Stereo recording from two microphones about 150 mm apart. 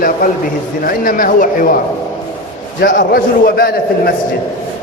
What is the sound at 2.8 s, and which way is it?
A man's voice, 65° left (ahead or behind).